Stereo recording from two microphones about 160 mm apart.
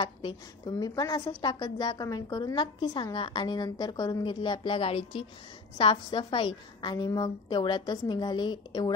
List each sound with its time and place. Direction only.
0.0 s a woman's voice: 30° left (ahead or behind)